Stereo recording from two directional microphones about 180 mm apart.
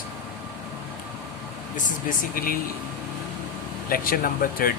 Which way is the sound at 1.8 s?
45° left (ahead or behind).